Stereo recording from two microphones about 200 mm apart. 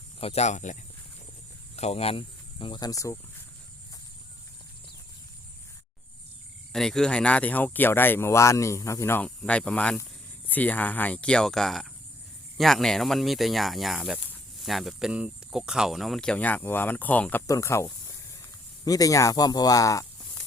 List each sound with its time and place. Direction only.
0.2 s speech: 30° left (ahead or behind); by 3.2 s 15° left (ahead or behind)
6.7 s speech: 5° left (ahead or behind)